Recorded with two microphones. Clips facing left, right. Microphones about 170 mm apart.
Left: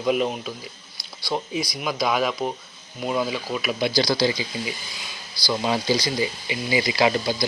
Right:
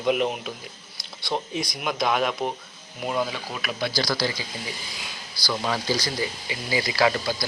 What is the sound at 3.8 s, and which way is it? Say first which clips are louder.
Speech: left 5 dB; 15° left (ahead or behind).